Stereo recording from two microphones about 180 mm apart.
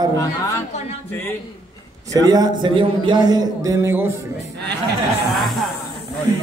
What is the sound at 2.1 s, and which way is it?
A man's voice, 20° right (ahead or behind).